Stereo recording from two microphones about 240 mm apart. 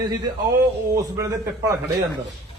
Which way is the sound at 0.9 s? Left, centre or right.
Centre.